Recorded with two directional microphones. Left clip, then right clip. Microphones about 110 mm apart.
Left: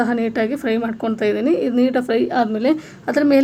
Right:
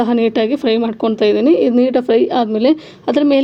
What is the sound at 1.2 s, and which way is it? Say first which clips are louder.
Speech: right 6 dB; 30° left (ahead or behind).